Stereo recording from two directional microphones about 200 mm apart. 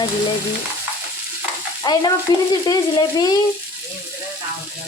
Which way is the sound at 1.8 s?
20° left (ahead or behind).